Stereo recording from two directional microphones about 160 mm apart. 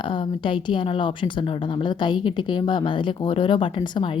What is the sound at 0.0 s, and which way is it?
A woman's voice, 30° left (ahead or behind).